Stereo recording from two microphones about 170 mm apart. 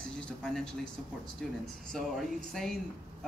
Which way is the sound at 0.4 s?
Centre (ahead or behind).